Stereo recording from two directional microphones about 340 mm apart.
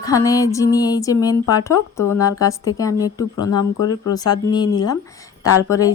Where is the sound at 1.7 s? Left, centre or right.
Left.